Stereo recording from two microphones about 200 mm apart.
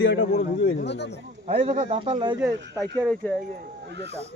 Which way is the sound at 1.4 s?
35° right (ahead or behind).